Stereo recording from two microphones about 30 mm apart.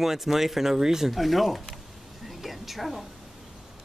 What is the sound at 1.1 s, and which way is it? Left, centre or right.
A woman's voice, centre.